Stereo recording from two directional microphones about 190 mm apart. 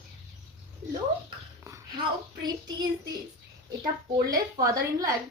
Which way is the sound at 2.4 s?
20° right (ahead or behind).